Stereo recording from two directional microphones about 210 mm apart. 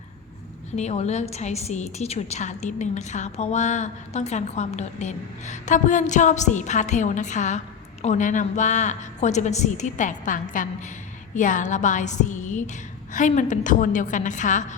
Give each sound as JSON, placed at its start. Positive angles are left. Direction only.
{"t": 0.8, "sound": "a woman's voice", "side_deg": 30}